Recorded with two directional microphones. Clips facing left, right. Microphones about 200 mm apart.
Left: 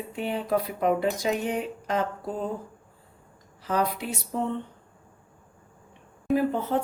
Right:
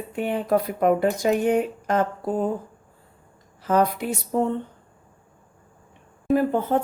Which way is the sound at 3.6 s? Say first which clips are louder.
Right 6 dB; 50° right (ahead or behind).